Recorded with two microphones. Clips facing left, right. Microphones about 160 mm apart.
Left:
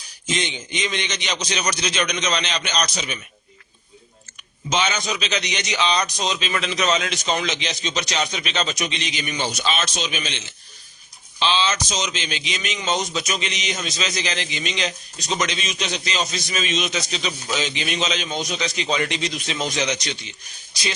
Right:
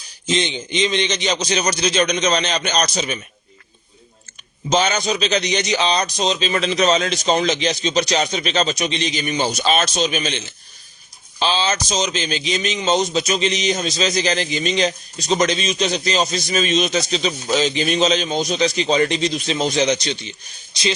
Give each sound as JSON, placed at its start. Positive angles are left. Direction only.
{"t": 0.3, "sound": "a man's voice", "side_deg": -30}
{"t": 4.7, "sound": "a man's voice", "side_deg": -40}